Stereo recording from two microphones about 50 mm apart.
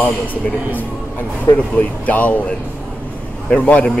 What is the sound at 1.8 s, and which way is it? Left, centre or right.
Speech, left.